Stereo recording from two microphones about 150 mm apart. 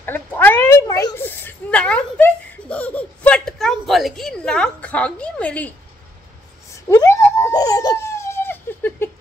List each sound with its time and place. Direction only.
0.0 s cat: 15° left (ahead or behind)
1.1 s giggle: 15° left (ahead or behind)
6.9 s laughter: 20° left (ahead or behind)